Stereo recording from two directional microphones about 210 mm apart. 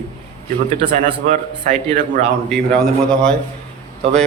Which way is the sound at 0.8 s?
35° right (ahead or behind).